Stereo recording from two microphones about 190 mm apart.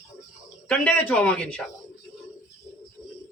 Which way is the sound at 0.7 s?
10° left (ahead or behind).